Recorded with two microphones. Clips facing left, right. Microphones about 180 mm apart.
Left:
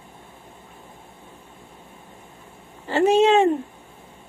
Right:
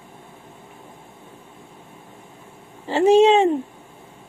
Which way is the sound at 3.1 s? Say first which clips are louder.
Right 4 dB; 30° right (ahead or behind).